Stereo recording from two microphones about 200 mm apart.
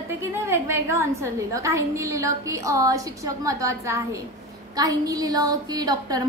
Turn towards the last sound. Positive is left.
turn(degrees=-20)  # may be behind; listen again after turning